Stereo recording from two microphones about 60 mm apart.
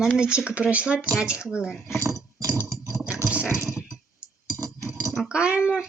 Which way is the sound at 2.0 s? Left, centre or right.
Right.